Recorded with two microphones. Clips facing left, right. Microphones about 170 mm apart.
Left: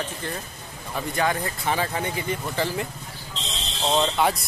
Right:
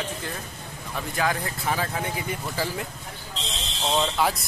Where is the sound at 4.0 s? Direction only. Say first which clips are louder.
Left 2 dB; centre (ahead or behind).